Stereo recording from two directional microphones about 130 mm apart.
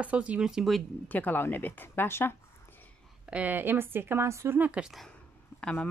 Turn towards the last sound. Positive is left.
turn(degrees=10)  # may be behind; listen again after turning